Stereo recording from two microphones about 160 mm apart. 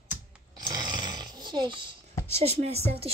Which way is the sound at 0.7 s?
25° right (ahead or behind).